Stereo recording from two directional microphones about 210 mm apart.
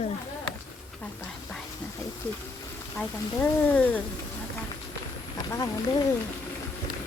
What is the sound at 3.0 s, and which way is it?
Speech, 10° left (ahead or behind).